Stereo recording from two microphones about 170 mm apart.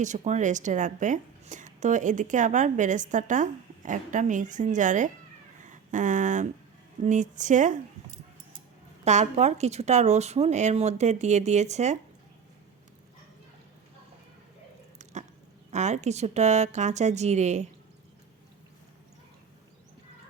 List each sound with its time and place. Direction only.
0.0 s a woman's voice: 45° right (ahead or behind)
9.0 s speech: 40° right (ahead or behind)
15.7 s a woman's voice: 45° right (ahead or behind)